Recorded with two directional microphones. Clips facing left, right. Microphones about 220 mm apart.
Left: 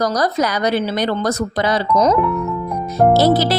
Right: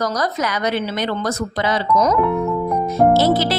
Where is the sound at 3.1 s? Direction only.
40° left (ahead or behind).